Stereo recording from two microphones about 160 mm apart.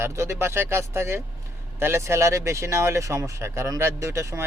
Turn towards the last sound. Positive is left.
turn(degrees=-20)  # may be behind; listen again after turning